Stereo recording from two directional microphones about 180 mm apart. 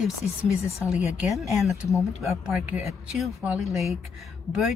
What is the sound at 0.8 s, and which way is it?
Speech, 5° right (ahead or behind).